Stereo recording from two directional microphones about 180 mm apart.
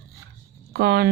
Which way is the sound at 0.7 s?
60° right (ahead or behind).